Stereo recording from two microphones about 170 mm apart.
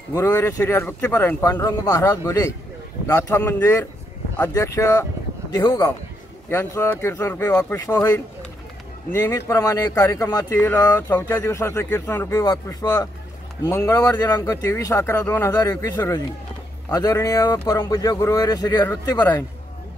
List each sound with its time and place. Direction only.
0.1 s speech: 15° left (ahead or behind)
6.5 s speech: 15° left (ahead or behind)